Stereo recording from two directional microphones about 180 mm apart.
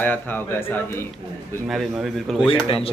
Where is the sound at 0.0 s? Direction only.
10° left (ahead or behind).